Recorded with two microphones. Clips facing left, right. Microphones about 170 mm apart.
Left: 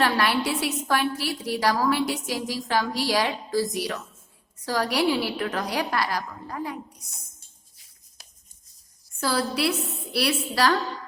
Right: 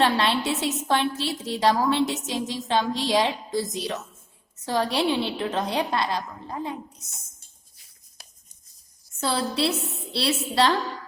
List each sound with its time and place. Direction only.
0.0 s a woman's voice: 25° right (ahead or behind)
9.2 s a woman's voice: 25° right (ahead or behind)